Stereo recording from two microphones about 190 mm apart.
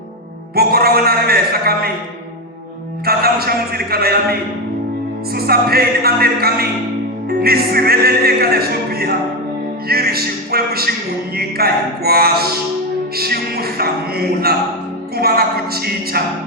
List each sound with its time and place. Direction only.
0.5 s a man's voice: 55° right (ahead or behind)
3.1 s a sound: 55° right (ahead or behind)
5.3 s a man's voice: 55° right (ahead or behind)
7.3 s music: 55° right (ahead or behind)
9.9 s a man's voice: 55° right (ahead or behind)
15.1 s music: 55° right (ahead or behind)